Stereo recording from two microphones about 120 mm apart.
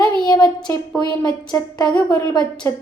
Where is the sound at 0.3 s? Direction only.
40° left (ahead or behind).